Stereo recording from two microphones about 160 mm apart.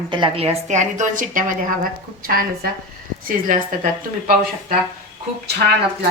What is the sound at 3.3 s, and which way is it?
Speech, 55° right (ahead or behind).